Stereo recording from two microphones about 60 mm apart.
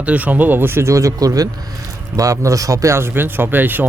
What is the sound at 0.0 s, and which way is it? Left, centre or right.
A man's voice, right.